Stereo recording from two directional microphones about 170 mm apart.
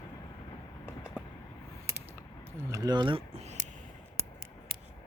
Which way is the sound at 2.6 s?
20° right (ahead or behind).